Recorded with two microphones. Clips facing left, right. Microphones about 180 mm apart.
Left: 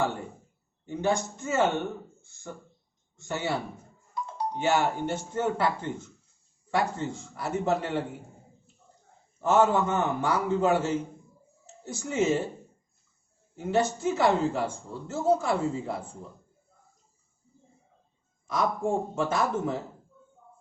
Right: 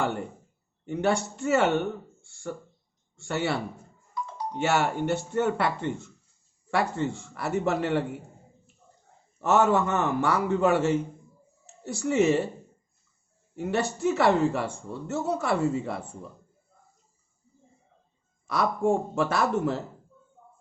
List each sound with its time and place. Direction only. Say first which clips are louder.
0.9 s speech: right 2 dB; 70° right (ahead or behind)
4.6 s speech: right 1 dB; 75° right (ahead or behind)
9.4 s speech: even; 75° right (ahead or behind)
13.6 s speech: left 1 dB; 70° right (ahead or behind)
18.4 s speech: right 3 dB; 70° right (ahead or behind)